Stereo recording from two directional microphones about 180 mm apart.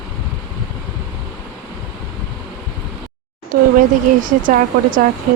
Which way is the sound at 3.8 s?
50° right (ahead or behind).